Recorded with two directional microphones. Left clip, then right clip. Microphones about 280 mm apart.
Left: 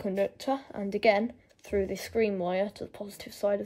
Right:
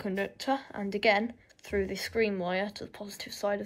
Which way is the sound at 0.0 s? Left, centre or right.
Left.